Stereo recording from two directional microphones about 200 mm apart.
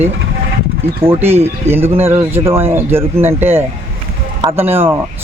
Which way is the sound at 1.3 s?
30° right (ahead or behind).